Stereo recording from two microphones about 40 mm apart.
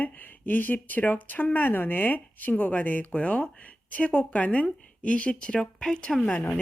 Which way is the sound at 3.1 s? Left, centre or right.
Left.